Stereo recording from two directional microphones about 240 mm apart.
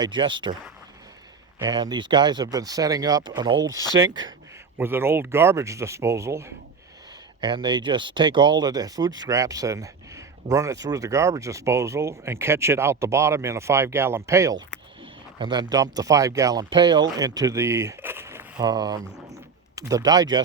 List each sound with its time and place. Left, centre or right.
0.0 s speech: centre
1.5 s speech: centre
4.8 s speech: centre
15.0 s a sound: centre
15.7 s speech: centre
19.3 s a sound: centre
20.1 s speech: centre